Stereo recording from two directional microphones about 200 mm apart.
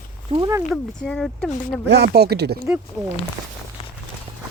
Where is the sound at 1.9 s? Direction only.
55° right (ahead or behind).